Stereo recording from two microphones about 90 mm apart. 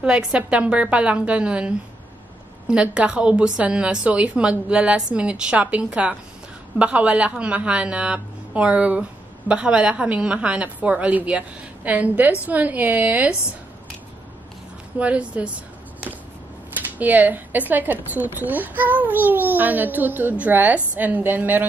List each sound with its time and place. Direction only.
0.0 s a woman's voice: 10° right (ahead or behind)
15.0 s a woman's voice: 15° right (ahead or behind)